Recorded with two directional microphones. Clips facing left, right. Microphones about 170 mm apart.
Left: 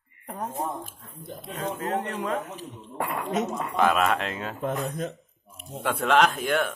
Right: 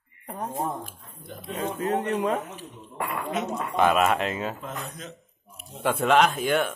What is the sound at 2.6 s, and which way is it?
Speech, 40° left (ahead or behind).